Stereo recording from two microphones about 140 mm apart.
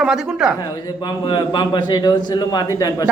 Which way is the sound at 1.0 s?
30° left (ahead or behind).